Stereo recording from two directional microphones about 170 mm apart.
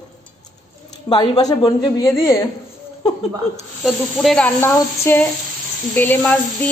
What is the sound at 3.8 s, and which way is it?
Speech, centre (ahead or behind).